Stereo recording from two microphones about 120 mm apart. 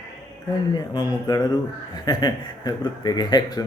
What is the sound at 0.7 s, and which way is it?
Speech, 35° left (ahead or behind).